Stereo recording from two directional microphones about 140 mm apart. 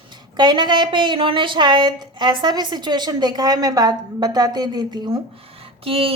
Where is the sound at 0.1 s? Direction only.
30° right (ahead or behind).